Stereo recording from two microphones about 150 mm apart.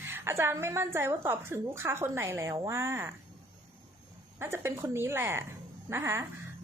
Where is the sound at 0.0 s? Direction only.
15° right (ahead or behind).